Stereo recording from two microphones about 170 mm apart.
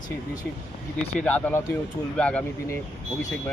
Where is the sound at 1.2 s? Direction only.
10° left (ahead or behind).